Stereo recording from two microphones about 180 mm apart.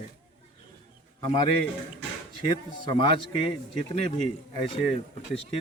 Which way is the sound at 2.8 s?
25° left (ahead or behind).